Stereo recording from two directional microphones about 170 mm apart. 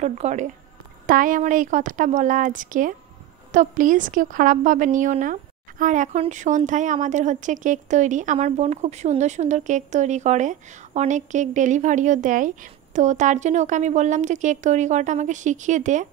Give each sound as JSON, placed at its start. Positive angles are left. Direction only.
{"t": 0.0, "sound": "a woman's voice", "side_deg": -40}
{"t": 1.0, "sound": "a woman's voice", "side_deg": -55}